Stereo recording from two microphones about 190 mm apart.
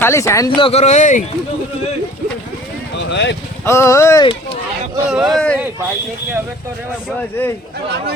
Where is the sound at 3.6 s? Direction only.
15° left (ahead or behind).